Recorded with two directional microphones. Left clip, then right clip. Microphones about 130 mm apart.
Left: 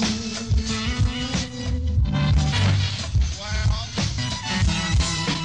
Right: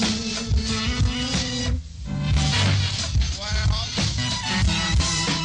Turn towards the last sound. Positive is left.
turn(degrees=20)  # may be behind; listen again after turning